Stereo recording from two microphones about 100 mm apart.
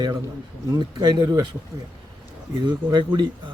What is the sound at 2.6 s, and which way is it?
Speech, 45° right (ahead or behind).